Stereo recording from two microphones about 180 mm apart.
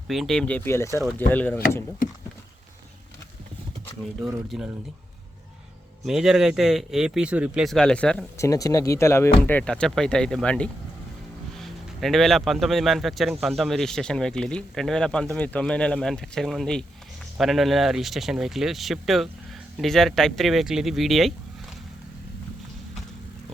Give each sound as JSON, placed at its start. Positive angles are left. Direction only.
{"t": 0.1, "sound": "speech", "side_deg": 0}
{"t": 4.2, "sound": "speech", "side_deg": -5}
{"t": 6.1, "sound": "speech", "side_deg": 0}
{"t": 8.4, "sound": "speech", "side_deg": 20}